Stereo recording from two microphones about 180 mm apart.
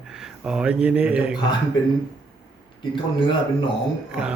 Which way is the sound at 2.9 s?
25° left (ahead or behind).